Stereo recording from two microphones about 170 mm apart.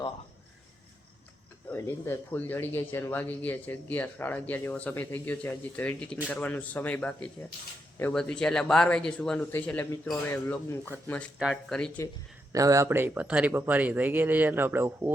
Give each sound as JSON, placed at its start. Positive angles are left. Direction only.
{"t": 1.7, "sound": "speech", "side_deg": 10}
{"t": 11.3, "sound": "speech", "side_deg": -5}
{"t": 12.0, "sound": "speech", "side_deg": 15}
{"t": 12.5, "sound": "speech", "side_deg": -20}